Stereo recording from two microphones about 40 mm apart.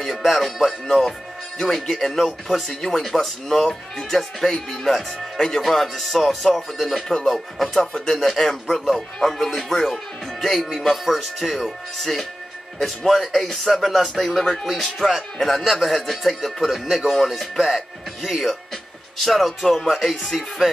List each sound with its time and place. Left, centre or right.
0.0 s speech: centre
7.0 s speech: centre
7.2 s speech: centre
17.1 s speech: centre